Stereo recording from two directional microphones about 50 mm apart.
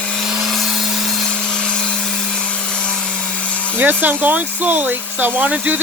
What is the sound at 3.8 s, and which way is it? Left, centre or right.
Speech, right.